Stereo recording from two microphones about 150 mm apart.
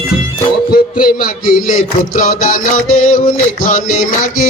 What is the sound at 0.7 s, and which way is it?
Music, 75° left (ahead or behind).